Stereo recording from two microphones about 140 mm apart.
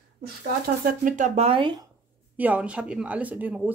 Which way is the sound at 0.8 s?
75° right (ahead or behind).